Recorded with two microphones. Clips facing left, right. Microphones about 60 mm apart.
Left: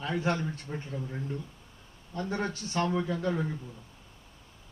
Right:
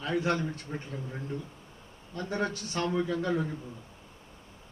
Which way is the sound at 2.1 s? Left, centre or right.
Left.